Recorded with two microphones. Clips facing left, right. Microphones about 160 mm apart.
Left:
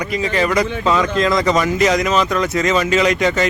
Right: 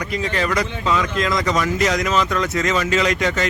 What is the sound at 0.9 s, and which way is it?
Speech, 35° left (ahead or behind).